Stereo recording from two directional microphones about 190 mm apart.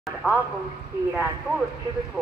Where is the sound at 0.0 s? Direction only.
Centre (ahead or behind).